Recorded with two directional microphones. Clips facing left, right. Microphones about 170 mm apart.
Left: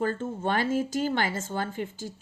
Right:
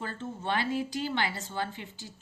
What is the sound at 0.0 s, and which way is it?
A woman's voice, 45° left (ahead or behind).